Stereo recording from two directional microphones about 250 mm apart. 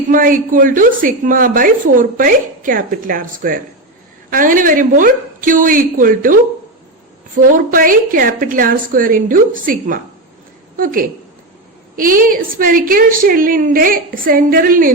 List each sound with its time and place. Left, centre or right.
0.1 s a woman's voice: right